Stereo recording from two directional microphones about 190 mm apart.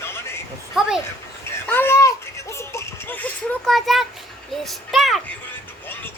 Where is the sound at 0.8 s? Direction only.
5° right (ahead or behind).